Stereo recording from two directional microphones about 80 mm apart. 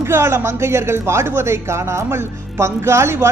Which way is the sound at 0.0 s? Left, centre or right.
Right.